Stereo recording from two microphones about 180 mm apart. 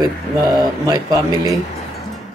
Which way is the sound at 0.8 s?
20° right (ahead or behind).